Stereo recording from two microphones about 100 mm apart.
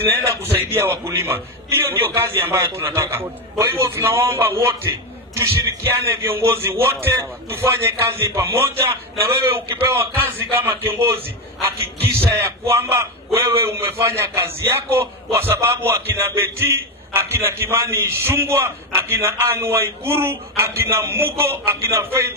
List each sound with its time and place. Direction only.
0.4 s a man's voice: 25° right (ahead or behind)
12.2 s a man's voice: 25° right (ahead or behind)